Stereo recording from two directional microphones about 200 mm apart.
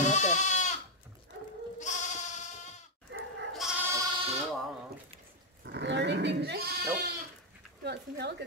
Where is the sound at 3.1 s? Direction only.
60° right (ahead or behind).